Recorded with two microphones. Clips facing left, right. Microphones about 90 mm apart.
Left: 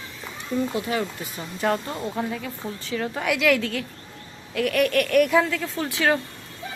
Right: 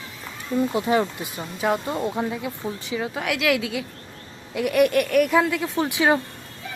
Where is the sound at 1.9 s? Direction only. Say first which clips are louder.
Right 3 dB; 20° right (ahead or behind); by 5.4 s centre (ahead or behind).